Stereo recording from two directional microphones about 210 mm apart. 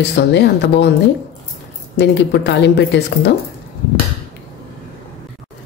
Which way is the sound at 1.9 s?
55° left (ahead or behind).